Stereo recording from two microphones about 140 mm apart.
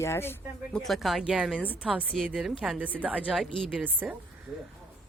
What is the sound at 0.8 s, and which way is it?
A woman's voice, centre (ahead or behind).